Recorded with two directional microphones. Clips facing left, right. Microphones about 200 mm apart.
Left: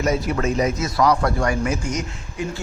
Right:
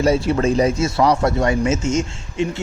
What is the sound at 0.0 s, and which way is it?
Speech, 30° right (ahead or behind).